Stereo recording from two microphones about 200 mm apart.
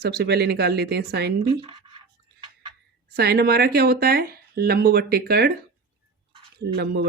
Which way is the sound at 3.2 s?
50° right (ahead or behind).